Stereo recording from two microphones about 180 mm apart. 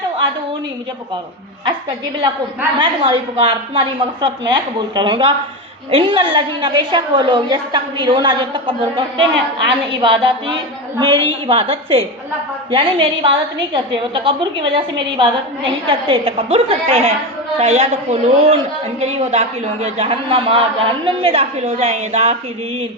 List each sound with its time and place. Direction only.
2.7 s a woman's voice: 25° right (ahead or behind)